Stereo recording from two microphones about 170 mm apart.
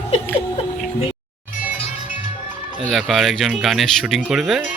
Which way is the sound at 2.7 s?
Centre (ahead or behind).